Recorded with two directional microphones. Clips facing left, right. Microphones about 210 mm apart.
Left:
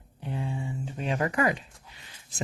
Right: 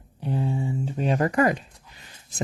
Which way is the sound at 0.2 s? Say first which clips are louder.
Right 7 dB; 40° right (ahead or behind).